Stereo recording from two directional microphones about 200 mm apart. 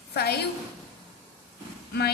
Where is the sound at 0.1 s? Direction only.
55° left (ahead or behind).